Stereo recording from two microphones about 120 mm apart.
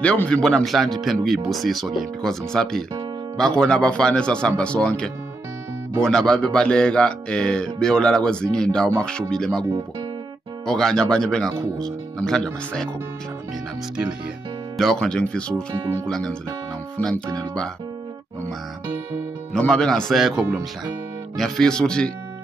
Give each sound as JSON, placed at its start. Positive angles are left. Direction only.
{"t": 0.0, "sound": "speech", "side_deg": 10}
{"t": 14.8, "sound": "speech", "side_deg": 5}
{"t": 15.8, "sound": "speech", "side_deg": -30}
{"t": 16.1, "sound": "speech", "side_deg": 5}
{"t": 19.5, "sound": "speech", "side_deg": 5}